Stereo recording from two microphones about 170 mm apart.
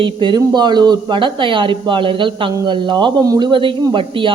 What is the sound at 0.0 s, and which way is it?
A woman's voice, 25° right (ahead or behind).